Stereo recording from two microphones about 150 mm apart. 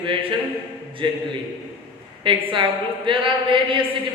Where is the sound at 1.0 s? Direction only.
30° right (ahead or behind).